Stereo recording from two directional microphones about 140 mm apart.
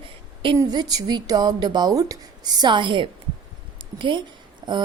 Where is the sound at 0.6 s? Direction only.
30° right (ahead or behind).